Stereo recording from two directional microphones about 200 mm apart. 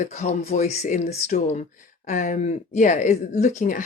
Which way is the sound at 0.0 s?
35° left (ahead or behind).